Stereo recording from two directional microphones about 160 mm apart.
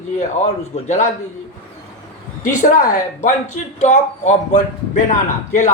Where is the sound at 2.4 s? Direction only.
55° left (ahead or behind).